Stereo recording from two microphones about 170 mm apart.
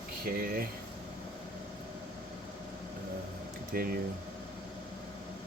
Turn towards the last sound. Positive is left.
turn(degrees=-60)  # may be behind; listen again after turning